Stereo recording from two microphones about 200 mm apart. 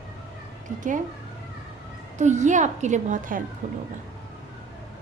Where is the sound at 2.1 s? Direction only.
35° right (ahead or behind).